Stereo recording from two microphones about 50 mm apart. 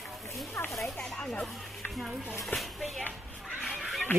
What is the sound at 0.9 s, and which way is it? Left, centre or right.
Speech, centre.